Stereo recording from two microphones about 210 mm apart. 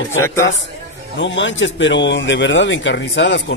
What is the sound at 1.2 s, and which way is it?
Speech, 60° left (ahead or behind).